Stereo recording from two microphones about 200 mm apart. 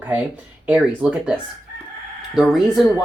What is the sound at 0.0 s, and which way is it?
Speech, 5° right (ahead or behind).